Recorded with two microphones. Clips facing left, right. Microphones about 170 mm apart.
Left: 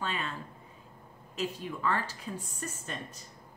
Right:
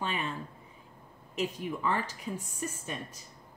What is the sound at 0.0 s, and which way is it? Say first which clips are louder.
Speech: right 1 dB; 15° right (ahead or behind).